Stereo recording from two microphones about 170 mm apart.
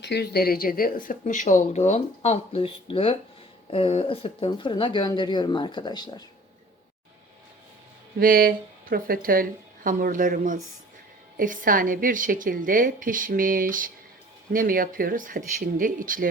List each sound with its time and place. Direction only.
0.0 s speech: 75° left (ahead or behind); by 6.2 s 25° left (ahead or behind)
8.2 s speech: 60° right (ahead or behind)